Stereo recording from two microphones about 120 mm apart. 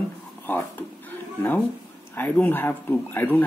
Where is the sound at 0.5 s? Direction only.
15° left (ahead or behind).